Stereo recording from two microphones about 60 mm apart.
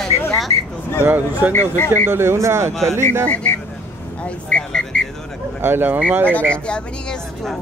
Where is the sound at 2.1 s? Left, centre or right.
Right.